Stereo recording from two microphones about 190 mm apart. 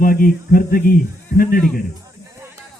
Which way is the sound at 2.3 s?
15° right (ahead or behind).